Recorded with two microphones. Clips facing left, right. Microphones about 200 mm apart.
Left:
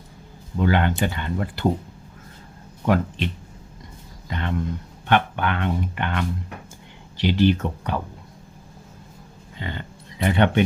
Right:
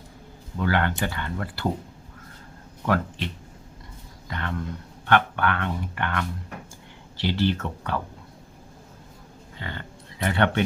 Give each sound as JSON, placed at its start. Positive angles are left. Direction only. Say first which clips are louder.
{"t": 0.6, "sound": "speech", "louder": "left 4 dB", "side_deg": 20}
{"t": 2.8, "sound": "speech", "louder": "left 4 dB", "side_deg": 20}
{"t": 4.3, "sound": "speech", "louder": "left 4 dB", "side_deg": 20}
{"t": 9.6, "sound": "speech", "louder": "left 4 dB", "side_deg": 20}